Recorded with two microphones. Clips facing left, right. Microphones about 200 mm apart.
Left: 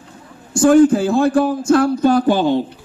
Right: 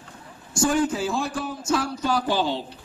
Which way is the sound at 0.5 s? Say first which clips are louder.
Left 12 dB; 55° left (ahead or behind).